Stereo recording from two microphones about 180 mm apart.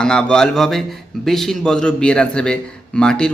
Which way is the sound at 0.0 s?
5° left (ahead or behind).